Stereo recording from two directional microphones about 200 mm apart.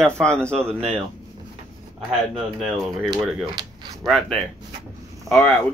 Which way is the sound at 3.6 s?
20° right (ahead or behind).